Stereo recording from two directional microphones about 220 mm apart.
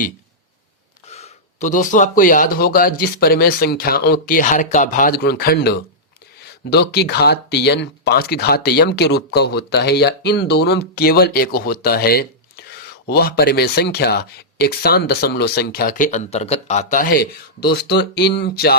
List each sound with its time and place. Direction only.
1.0 s speech: 30° left (ahead or behind); by 18.8 s 45° left (ahead or behind)